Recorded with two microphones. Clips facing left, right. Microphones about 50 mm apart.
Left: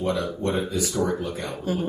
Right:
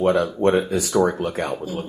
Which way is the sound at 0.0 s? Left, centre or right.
Right.